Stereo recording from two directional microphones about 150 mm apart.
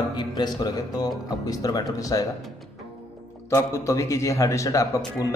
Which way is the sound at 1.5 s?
25° left (ahead or behind).